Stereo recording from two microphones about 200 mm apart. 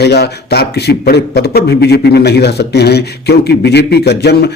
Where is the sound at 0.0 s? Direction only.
55° left (ahead or behind).